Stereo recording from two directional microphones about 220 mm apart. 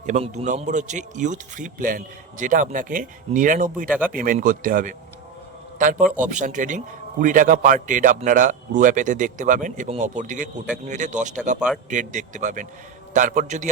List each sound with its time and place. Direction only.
0.0 s a man's voice: 35° right (ahead or behind)
3.8 s speech: 5° right (ahead or behind)
4.1 s a man's voice: 40° right (ahead or behind)